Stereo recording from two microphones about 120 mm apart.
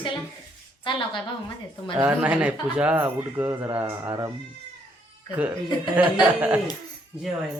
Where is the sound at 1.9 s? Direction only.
10° right (ahead or behind).